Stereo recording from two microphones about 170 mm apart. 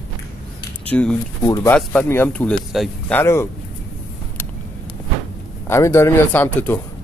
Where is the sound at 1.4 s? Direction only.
20° left (ahead or behind).